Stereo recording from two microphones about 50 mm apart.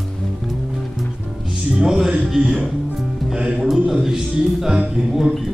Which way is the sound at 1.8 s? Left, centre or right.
Centre.